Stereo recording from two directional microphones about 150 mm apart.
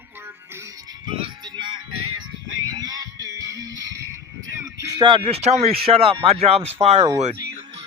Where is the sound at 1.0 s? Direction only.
30° right (ahead or behind).